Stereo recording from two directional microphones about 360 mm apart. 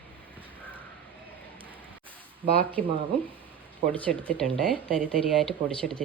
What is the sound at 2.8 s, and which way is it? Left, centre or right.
Speech, right.